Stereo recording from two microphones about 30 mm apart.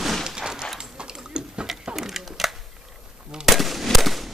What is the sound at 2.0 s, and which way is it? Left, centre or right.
Typewriter, centre.